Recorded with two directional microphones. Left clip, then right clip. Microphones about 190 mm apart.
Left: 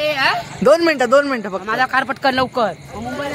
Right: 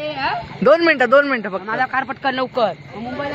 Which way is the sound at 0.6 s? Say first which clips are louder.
Even; 20° left (ahead or behind).